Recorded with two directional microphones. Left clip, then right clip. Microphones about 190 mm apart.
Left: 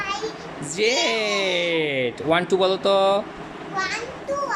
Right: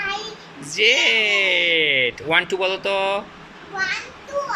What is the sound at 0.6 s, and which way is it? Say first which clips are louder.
Speech: right 5 dB; 20° left (ahead or behind).